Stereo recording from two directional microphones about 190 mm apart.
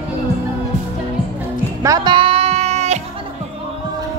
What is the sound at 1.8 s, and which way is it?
Music, 20° right (ahead or behind).